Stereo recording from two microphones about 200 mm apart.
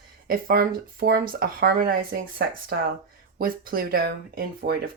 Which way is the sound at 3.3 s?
45° right (ahead or behind).